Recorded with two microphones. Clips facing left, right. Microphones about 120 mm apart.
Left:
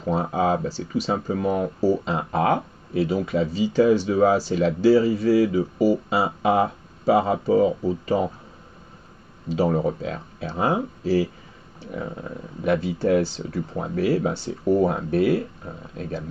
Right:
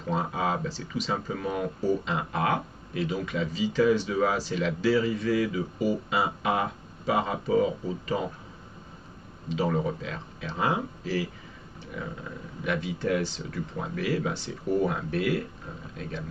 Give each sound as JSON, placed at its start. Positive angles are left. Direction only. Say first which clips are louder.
{"t": 0.0, "sound": "speech", "louder": "left 6 dB", "side_deg": 40}
{"t": 9.5, "sound": "speech", "louder": "left 6 dB", "side_deg": 35}